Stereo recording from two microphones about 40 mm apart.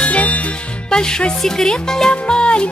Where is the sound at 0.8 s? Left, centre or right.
Centre.